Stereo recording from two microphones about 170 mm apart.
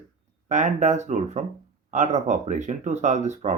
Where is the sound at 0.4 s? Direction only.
45° right (ahead or behind).